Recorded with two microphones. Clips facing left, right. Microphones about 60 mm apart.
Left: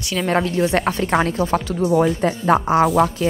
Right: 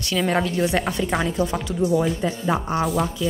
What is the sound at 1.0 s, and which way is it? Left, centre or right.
Speech, left.